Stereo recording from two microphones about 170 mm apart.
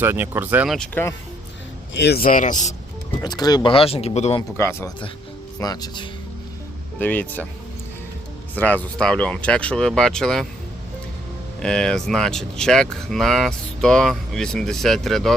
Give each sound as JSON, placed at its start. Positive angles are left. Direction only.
{"t": 0.0, "sound": "speech", "side_deg": -10}
{"t": 0.8, "sound": "speech", "side_deg": 10}
{"t": 2.0, "sound": "a man's voice", "side_deg": 70}
{"t": 3.2, "sound": "speech", "side_deg": 25}
{"t": 4.5, "sound": "speech", "side_deg": 15}
{"t": 7.0, "sound": "speech", "side_deg": 10}
{"t": 8.5, "sound": "speech", "side_deg": 10}
{"t": 11.6, "sound": "speech", "side_deg": 5}